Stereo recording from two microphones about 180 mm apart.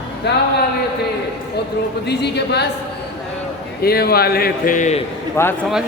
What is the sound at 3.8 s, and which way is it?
A man's voice, 60° left (ahead or behind).